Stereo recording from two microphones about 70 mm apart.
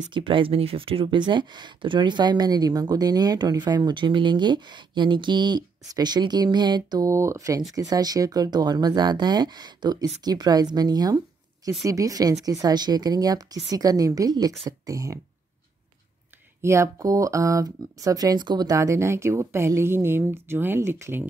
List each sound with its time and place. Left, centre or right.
1.1 s speech: right
7.1 s speech: right
11.8 s speech: right
16.6 s speech: right
18.8 s speech: right